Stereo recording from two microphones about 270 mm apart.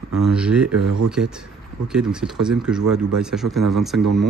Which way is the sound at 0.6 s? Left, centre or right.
Right.